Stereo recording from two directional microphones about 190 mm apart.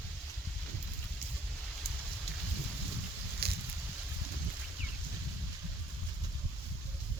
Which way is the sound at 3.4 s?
55° right (ahead or behind).